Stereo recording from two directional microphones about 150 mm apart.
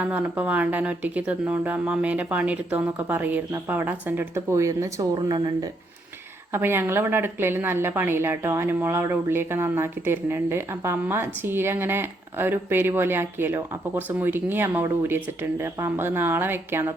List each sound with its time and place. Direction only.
0.0 s speech: 10° right (ahead or behind); by 5.6 s 30° right (ahead or behind)
6.5 s speech: 15° right (ahead or behind)